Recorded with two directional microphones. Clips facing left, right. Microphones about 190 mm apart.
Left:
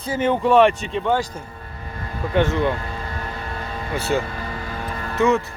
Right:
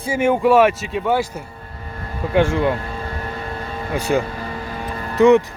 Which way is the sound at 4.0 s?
15° right (ahead or behind).